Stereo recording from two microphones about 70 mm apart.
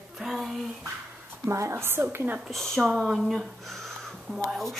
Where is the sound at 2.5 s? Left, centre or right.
Centre.